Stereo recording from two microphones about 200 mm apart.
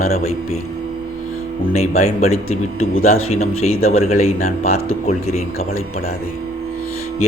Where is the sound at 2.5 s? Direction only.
90° left.